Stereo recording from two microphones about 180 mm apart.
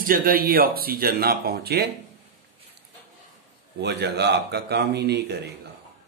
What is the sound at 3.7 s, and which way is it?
Speech, 65° right (ahead or behind).